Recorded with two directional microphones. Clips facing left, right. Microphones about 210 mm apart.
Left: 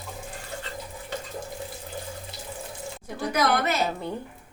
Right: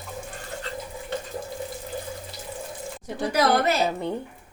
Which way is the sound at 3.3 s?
30° right (ahead or behind).